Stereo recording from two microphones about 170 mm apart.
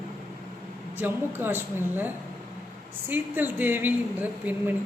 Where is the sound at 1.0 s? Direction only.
10° right (ahead or behind).